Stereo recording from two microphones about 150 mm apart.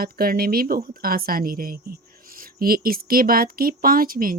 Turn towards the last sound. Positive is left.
turn(degrees=-70)  # may be behind; listen again after turning